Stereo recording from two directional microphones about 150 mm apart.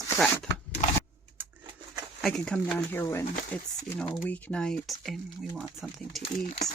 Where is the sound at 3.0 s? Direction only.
15° left (ahead or behind); by 6.2 s centre (ahead or behind).